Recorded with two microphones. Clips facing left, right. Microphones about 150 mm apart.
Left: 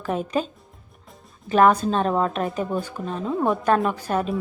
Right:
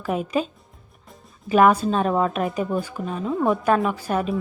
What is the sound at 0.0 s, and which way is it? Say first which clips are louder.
A woman's voice: right 1 dB; 10° right (ahead or behind).